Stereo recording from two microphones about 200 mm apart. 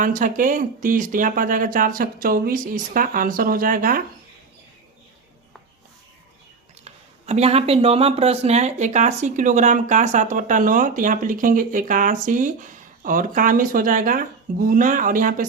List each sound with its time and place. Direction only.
0.0 s speech: 40° right (ahead or behind)
6.8 s speech: 30° right (ahead or behind)